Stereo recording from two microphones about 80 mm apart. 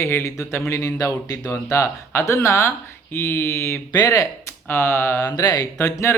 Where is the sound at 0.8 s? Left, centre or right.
Left.